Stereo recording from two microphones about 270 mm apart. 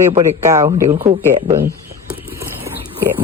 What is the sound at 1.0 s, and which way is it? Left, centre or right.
Speech, right.